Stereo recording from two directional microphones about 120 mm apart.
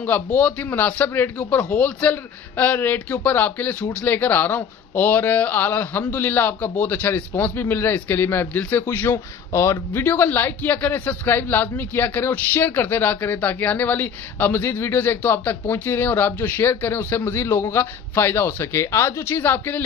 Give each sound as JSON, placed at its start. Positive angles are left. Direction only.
{"t": 0.0, "sound": "a man's voice", "side_deg": 15}